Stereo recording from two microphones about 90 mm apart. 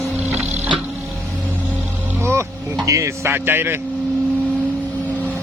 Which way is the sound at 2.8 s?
35° right (ahead or behind).